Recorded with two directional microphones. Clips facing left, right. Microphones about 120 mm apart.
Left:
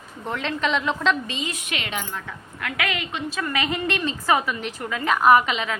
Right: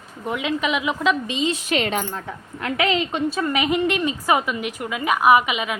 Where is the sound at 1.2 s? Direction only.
20° right (ahead or behind).